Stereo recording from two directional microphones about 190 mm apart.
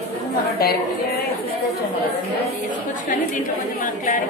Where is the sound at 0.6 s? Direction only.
55° left (ahead or behind).